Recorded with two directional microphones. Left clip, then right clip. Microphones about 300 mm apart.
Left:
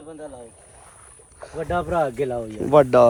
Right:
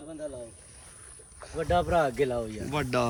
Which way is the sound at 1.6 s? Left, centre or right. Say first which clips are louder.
Left 3 dB; left.